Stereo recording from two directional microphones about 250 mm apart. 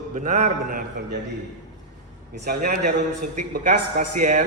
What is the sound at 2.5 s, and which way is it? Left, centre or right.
A man's voice, right.